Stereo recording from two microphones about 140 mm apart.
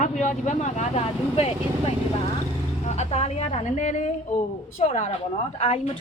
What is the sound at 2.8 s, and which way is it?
A woman's voice, 50° left (ahead or behind).